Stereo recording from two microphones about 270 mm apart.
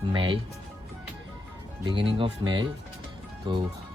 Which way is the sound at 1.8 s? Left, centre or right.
Centre.